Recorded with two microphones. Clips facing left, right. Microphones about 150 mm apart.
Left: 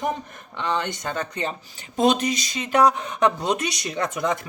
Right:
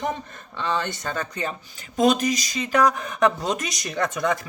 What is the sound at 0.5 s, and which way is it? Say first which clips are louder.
Speech: even; 15° left (ahead or behind).